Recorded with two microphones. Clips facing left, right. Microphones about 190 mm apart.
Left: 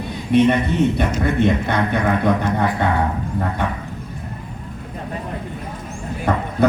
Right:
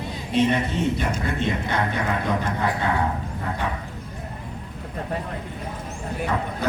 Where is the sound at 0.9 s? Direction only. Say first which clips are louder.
Left 7 dB; 60° left (ahead or behind).